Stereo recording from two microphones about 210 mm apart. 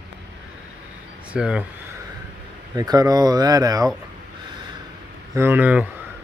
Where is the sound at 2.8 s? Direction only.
20° right (ahead or behind).